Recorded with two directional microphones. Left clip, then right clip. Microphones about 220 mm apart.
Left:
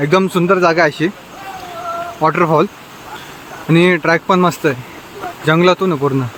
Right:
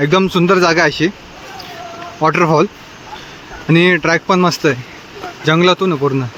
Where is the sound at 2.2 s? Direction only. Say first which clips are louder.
Right 1 dB; 10° right (ahead or behind).